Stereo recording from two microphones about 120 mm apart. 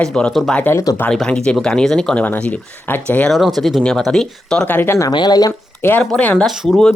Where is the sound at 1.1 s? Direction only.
5° left (ahead or behind).